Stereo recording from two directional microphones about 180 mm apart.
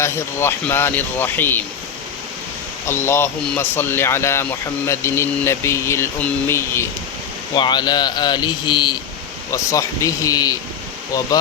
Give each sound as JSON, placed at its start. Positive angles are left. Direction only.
{"t": 0.0, "sound": "speech", "side_deg": 15}
{"t": 2.8, "sound": "speech", "side_deg": 15}
{"t": 7.5, "sound": "speech", "side_deg": 25}